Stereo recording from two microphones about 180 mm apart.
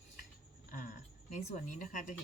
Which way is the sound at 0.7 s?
45° left (ahead or behind).